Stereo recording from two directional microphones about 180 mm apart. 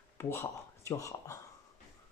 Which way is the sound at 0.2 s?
15° left (ahead or behind).